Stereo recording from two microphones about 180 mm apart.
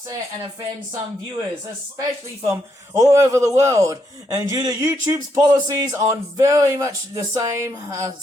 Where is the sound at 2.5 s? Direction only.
15° right (ahead or behind).